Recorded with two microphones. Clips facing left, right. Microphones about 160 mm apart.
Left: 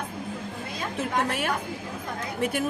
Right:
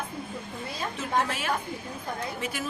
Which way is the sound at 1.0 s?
60° left (ahead or behind).